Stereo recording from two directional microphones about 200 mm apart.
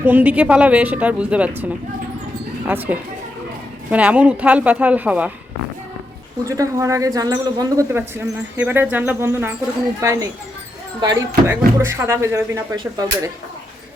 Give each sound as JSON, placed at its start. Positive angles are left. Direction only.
{"t": 0.0, "sound": "speech", "side_deg": -10}
{"t": 2.6, "sound": "speech", "side_deg": -10}
{"t": 6.4, "sound": "speech", "side_deg": -15}
{"t": 11.4, "sound": "speech", "side_deg": -10}